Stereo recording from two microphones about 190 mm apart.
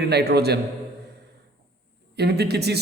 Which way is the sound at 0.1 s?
60° right (ahead or behind).